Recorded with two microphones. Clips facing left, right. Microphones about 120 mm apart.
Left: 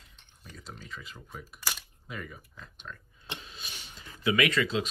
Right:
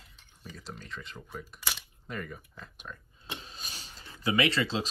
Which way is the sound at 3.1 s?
35° right (ahead or behind).